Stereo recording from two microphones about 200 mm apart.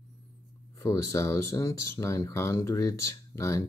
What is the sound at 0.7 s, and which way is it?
Speech, 15° left (ahead or behind).